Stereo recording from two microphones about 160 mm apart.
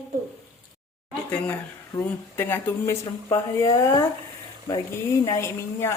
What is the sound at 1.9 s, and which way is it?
Speech, 15° left (ahead or behind).